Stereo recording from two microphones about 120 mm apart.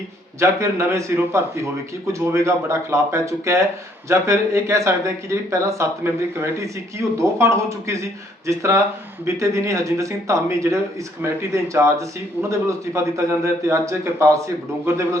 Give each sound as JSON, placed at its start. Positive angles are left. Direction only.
{"t": 0.3, "sound": "speech", "side_deg": -25}
{"t": 7.2, "sound": "speech", "side_deg": -25}